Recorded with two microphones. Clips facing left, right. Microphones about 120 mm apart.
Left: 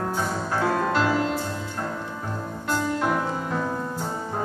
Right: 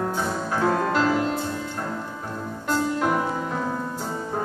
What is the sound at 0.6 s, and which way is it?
Music, 5° left (ahead or behind).